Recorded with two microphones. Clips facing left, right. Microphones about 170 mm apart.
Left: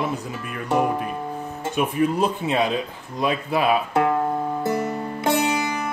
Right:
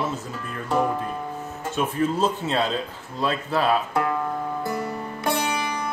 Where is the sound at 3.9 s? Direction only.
25° left (ahead or behind).